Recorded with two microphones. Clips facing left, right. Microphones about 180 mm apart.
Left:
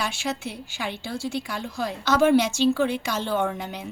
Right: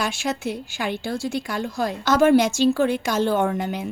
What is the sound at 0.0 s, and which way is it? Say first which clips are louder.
A woman's voice: right 4 dB; 45° right (ahead or behind).